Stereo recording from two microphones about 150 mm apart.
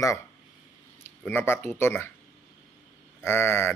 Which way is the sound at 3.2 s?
15° left (ahead or behind).